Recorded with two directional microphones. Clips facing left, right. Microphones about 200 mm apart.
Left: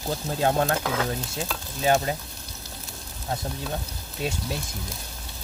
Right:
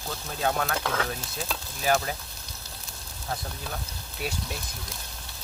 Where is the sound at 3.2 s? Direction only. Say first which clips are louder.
Left 4 dB; 25° left (ahead or behind).